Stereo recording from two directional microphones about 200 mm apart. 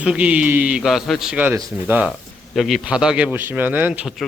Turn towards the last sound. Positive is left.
turn(degrees=-5)  # may be behind; listen again after turning